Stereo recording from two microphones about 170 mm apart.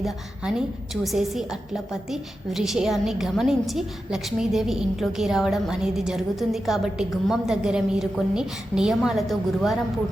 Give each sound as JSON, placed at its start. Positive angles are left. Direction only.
{"t": 0.0, "sound": "a woman's voice", "side_deg": -5}